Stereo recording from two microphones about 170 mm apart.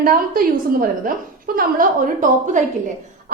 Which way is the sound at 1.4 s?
55° right (ahead or behind).